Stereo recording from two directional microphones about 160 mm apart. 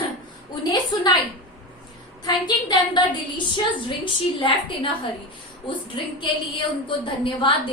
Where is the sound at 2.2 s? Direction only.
25° left (ahead or behind).